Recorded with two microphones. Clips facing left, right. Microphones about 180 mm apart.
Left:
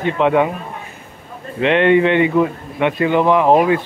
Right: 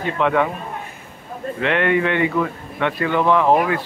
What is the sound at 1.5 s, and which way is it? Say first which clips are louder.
A man's voice: left 6 dB; 20° left (ahead or behind).